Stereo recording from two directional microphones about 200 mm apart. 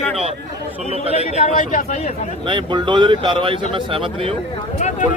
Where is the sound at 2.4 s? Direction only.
25° right (ahead or behind).